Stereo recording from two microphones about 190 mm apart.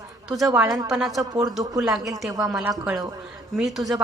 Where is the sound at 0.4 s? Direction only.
10° right (ahead or behind).